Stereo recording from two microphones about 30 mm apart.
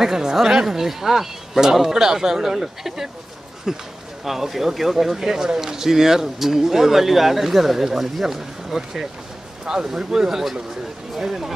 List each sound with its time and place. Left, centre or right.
0.0 s a man's voice: centre